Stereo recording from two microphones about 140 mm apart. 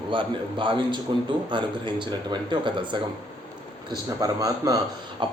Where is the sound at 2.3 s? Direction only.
35° right (ahead or behind).